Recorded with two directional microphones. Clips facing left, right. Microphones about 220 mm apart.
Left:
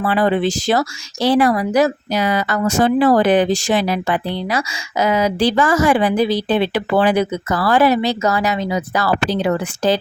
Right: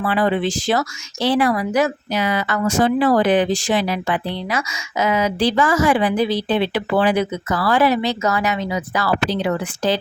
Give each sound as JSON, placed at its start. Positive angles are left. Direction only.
{"t": 0.0, "sound": "speech", "side_deg": 40}